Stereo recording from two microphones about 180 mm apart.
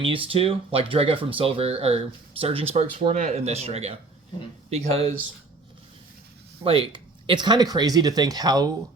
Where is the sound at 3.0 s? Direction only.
40° right (ahead or behind).